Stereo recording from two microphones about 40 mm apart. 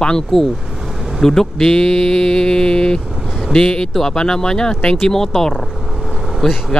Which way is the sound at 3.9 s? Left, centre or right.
Centre.